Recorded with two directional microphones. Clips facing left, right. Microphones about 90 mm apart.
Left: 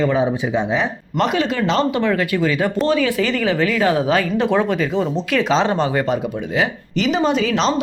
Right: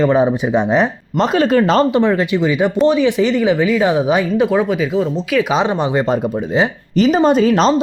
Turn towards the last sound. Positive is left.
turn(degrees=-40)  # may be behind; listen again after turning